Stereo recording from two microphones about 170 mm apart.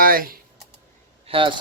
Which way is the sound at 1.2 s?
30° right (ahead or behind).